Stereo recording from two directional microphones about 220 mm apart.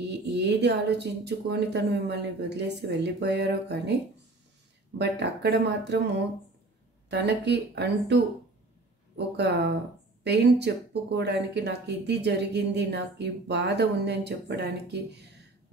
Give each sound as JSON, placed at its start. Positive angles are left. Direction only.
{"t": 0.3, "sound": "speech", "side_deg": -50}
{"t": 7.1, "sound": "speech", "side_deg": -50}
{"t": 9.5, "sound": "speech", "side_deg": -50}